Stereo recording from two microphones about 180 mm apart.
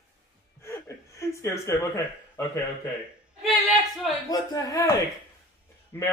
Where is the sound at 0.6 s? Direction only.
15° left (ahead or behind).